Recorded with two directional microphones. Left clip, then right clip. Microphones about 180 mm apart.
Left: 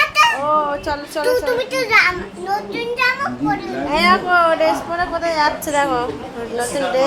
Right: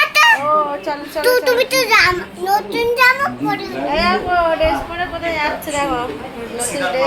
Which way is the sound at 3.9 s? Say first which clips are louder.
Left 2 dB; 20° left (ahead or behind).